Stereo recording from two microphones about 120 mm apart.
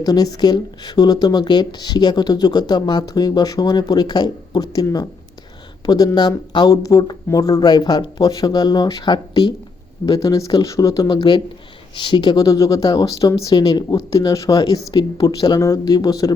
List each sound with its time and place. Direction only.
0.0 s speech: 35° left (ahead or behind)
10.1 s speech: 30° left (ahead or behind)